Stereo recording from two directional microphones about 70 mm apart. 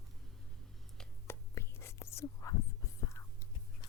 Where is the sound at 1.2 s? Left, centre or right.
Left.